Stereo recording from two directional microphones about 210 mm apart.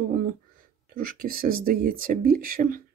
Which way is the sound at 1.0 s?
45° right (ahead or behind).